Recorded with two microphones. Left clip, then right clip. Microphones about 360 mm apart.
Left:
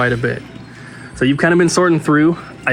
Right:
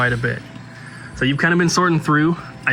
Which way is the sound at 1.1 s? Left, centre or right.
Centre.